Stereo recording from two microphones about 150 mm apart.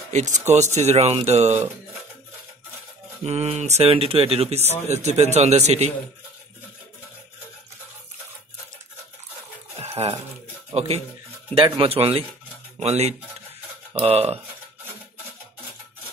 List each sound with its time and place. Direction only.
0.1 s speech: 50° right (ahead or behind)
3.3 s speech: 45° right (ahead or behind)
9.8 s stir: 45° right (ahead or behind)
10.7 s speech: 45° right (ahead or behind)